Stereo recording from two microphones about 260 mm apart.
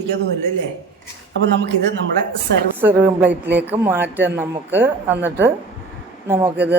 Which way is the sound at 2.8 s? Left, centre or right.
Centre.